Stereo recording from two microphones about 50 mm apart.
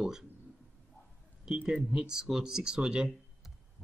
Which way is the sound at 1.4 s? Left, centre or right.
Centre.